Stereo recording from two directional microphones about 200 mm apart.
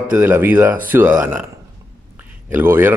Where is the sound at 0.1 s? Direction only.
10° right (ahead or behind).